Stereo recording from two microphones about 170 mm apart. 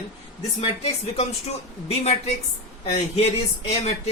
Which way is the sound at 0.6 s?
35° left (ahead or behind).